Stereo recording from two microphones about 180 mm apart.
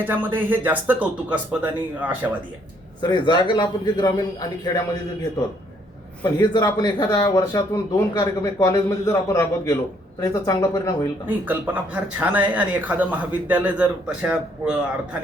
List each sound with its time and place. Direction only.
0.0 s a man's voice: 10° right (ahead or behind)
3.0 s speech: 25° left (ahead or behind)
6.2 s speech: 25° left (ahead or behind)
11.3 s a man's voice: 10° right (ahead or behind)